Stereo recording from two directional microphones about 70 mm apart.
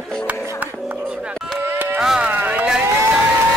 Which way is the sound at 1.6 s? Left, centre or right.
Right.